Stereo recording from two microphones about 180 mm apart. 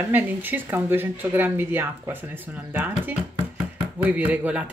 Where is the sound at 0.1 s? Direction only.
10° right (ahead or behind).